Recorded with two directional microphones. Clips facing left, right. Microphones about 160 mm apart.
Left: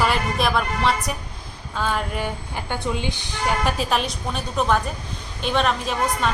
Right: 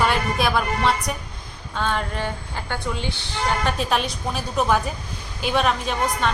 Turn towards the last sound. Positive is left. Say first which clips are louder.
# even
turn(degrees=0)  # may be behind; listen again after turning